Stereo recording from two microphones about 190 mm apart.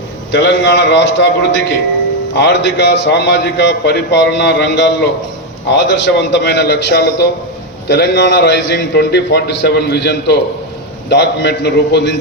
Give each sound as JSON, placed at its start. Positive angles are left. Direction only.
{"t": 0.3, "sound": "a man's voice", "side_deg": 65}